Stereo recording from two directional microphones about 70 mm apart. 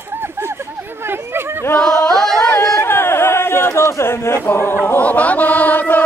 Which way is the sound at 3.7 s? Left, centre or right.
Left.